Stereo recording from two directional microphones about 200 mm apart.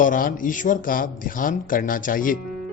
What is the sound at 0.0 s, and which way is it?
Speech, 40° left (ahead or behind).